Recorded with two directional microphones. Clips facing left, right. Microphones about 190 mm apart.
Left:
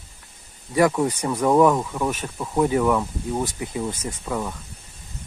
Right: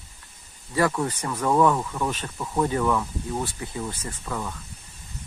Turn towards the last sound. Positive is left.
turn(degrees=10)  # may be behind; listen again after turning